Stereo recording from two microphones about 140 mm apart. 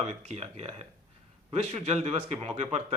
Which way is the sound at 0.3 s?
45° right (ahead or behind).